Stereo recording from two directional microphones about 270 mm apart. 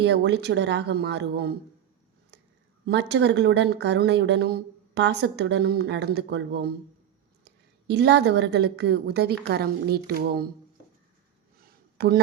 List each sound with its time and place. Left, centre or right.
0.0 s speech: right
2.8 s a woman's voice: right
11.9 s speech: right